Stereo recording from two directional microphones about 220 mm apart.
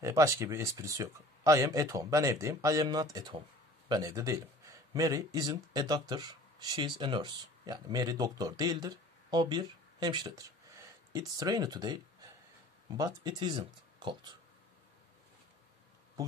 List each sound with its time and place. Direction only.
0.0 s speech: 15° right (ahead or behind)